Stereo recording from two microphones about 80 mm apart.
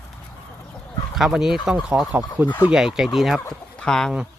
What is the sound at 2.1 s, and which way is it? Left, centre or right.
Speech, centre.